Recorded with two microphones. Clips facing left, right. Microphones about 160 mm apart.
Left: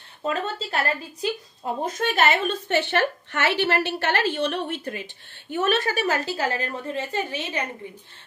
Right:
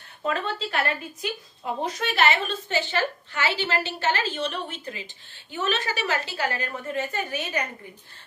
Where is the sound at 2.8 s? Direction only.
65° left (ahead or behind).